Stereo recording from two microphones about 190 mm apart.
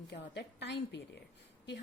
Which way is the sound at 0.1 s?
65° left (ahead or behind).